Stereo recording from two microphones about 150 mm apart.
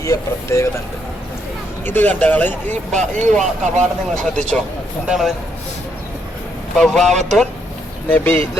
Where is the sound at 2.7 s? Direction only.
55° right (ahead or behind).